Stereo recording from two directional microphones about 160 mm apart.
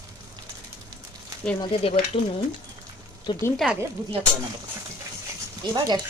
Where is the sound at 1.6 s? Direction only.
35° left (ahead or behind).